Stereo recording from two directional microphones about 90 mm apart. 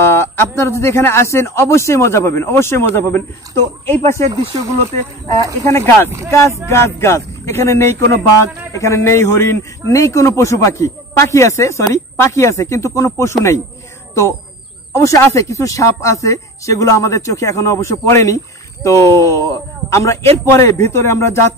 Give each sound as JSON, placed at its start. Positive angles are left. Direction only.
{"t": 0.0, "sound": "speech", "side_deg": 30}
{"t": 5.6, "sound": "speech", "side_deg": 30}
{"t": 6.0, "sound": "speech", "side_deg": -35}
{"t": 6.7, "sound": "speech", "side_deg": 30}
{"t": 15.0, "sound": "speech", "side_deg": 35}